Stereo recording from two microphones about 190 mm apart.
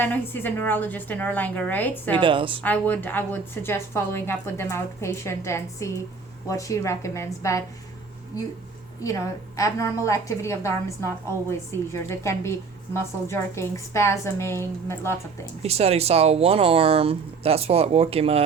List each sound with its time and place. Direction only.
0.0 s a woman's voice: 10° left (ahead or behind)
2.2 s a woman's voice: 25° right (ahead or behind)
2.6 s a woman's voice: 10° left (ahead or behind)
9.6 s a woman's voice: 15° left (ahead or behind)
15.6 s speech: 35° right (ahead or behind)